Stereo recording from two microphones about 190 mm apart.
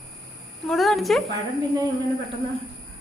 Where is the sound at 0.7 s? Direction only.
Centre (ahead or behind).